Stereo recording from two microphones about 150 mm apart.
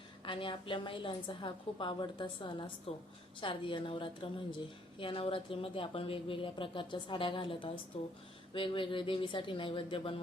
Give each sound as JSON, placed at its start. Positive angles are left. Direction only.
{"t": 0.3, "sound": "speech", "side_deg": 35}